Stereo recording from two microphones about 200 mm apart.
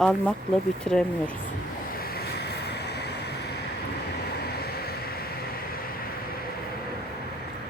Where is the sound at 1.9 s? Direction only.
50° left (ahead or behind).